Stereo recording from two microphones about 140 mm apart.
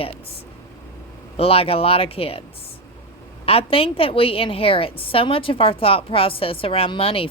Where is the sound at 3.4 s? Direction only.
40° left (ahead or behind).